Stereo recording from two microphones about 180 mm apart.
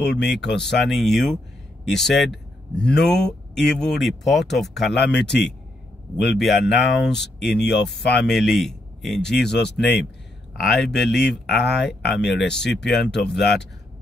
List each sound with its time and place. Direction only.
0.0 s speech: 70° left (ahead or behind)
0.6 s speech: centre (ahead or behind)
4.9 s speech: 70° left (ahead or behind)
6.4 s speech: centre (ahead or behind)
7.5 s speech: 70° left (ahead or behind)
8.2 s speech: centre (ahead or behind)
9.4 s speech: 70° left (ahead or behind)
10.6 s speech: centre (ahead or behind)
11.8 s speech: 70° left (ahead or behind)
12.4 s speech: 5° left (ahead or behind)
13.0 s speech: 70° left (ahead or behind)